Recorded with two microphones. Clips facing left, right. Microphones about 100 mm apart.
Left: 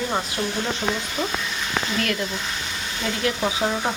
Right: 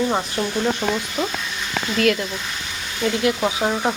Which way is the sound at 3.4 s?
15° right (ahead or behind).